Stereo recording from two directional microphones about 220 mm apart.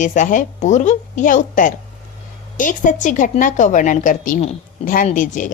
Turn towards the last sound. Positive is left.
turn(degrees=35)  # may be behind; listen again after turning